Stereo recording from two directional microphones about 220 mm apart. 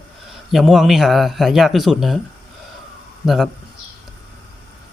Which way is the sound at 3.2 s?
Centre (ahead or behind).